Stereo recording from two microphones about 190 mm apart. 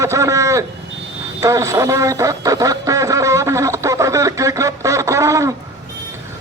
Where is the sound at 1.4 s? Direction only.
15° right (ahead or behind).